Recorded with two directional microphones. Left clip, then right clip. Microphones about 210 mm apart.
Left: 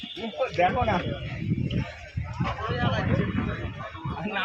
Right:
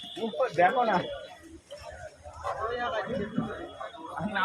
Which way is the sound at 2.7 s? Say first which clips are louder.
Left 3 dB; 40° left (ahead or behind).